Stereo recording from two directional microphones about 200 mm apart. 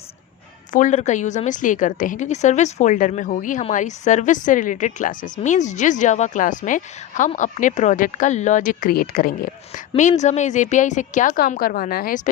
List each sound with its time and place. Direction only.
0.7 s a woman's voice: 40° left (ahead or behind)
9.7 s a woman's voice: 35° left (ahead or behind)